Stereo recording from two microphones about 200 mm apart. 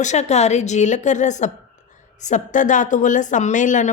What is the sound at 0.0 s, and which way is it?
Speech, 35° left (ahead or behind).